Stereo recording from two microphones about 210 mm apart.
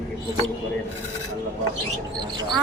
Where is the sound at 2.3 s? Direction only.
20° right (ahead or behind).